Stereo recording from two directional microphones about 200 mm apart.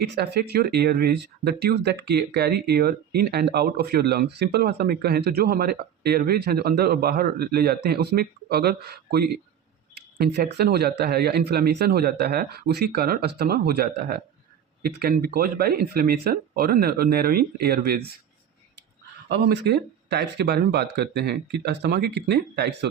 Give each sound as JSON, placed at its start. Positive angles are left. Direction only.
{"t": 0.0, "sound": "speech", "side_deg": -55}
{"t": 19.3, "sound": "speech", "side_deg": -55}